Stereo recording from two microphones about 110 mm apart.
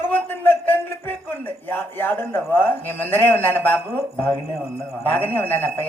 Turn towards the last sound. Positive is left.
turn(degrees=20)  # may be behind; listen again after turning